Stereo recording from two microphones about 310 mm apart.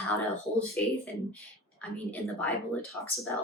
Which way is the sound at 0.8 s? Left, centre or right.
Centre.